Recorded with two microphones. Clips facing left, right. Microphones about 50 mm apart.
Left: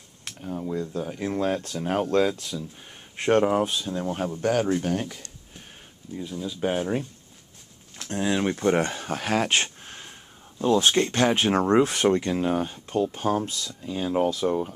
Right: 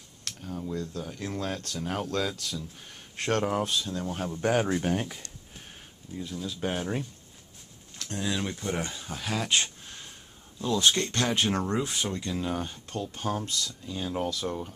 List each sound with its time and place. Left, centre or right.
0.2 s speech: left
4.4 s speech: centre
6.1 s speech: centre
8.0 s a sound: left
8.4 s speech: left
11.7 s speech: left
12.5 s speech: centre